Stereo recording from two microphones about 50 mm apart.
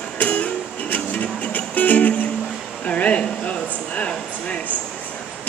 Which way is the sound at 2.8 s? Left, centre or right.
Left.